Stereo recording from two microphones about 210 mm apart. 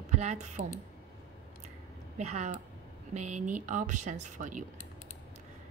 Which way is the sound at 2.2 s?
35° right (ahead or behind).